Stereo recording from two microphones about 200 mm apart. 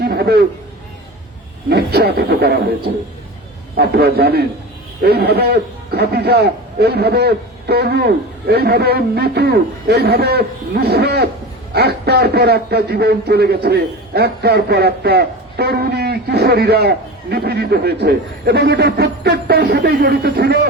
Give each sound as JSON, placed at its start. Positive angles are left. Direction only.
{"t": 0.0, "sound": "a sound", "side_deg": -55}
{"t": 1.7, "sound": "a man's voice", "side_deg": -55}
{"t": 3.8, "sound": "a man's voice", "side_deg": -55}